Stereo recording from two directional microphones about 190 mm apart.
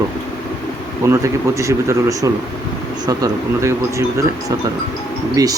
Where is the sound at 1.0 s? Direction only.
15° right (ahead or behind).